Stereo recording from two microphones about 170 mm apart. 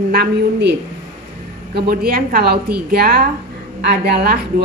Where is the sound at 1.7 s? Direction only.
65° right (ahead or behind).